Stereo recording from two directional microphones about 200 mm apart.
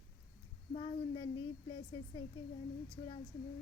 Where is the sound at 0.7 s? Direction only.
25° left (ahead or behind).